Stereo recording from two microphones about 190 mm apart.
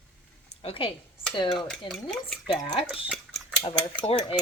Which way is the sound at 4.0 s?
30° left (ahead or behind).